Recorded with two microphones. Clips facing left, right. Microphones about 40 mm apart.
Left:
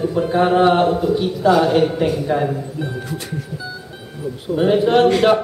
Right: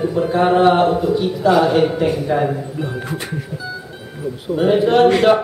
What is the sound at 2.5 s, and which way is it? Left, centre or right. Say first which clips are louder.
Speech: right 1 dB; right.